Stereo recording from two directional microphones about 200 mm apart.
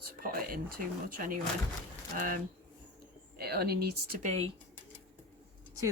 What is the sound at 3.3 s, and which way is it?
Speech, 50° right (ahead or behind).